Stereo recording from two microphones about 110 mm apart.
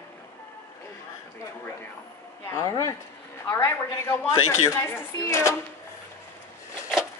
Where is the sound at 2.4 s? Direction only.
25° left (ahead or behind).